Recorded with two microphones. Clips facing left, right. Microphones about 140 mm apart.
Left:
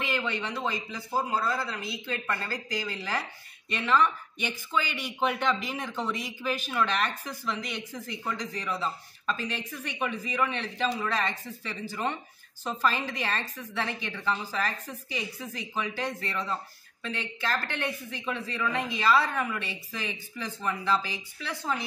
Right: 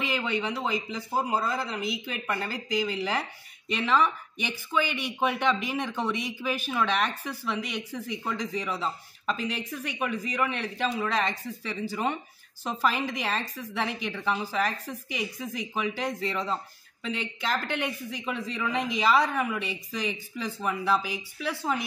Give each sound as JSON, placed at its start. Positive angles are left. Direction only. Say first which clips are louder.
{"t": 0.1, "sound": "a woman's voice", "louder": "right 2 dB", "side_deg": -15}
{"t": 5.4, "sound": "a woman's voice", "louder": "right 2 dB", "side_deg": -10}